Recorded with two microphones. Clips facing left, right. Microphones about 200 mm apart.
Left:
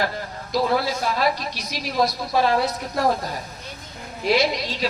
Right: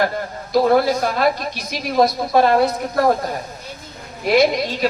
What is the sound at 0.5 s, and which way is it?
Speech, 50° right (ahead or behind).